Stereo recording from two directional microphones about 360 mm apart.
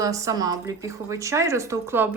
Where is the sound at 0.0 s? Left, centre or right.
Centre.